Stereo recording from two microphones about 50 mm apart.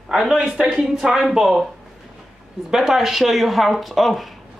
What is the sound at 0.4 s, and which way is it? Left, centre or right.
Speech, right.